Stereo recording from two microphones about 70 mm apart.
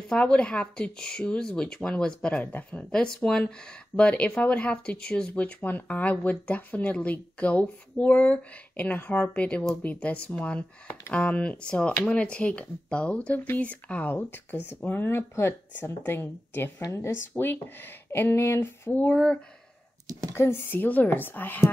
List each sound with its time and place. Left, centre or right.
0.1 s speech: centre
2.4 s speech: left
2.8 s speech: centre; by 19.0 s left
20.3 s speech: left